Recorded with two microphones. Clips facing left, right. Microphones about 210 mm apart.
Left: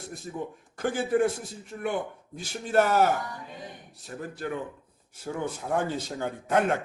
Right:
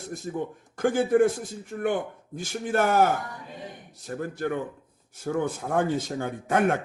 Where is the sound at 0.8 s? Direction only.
55° right (ahead or behind).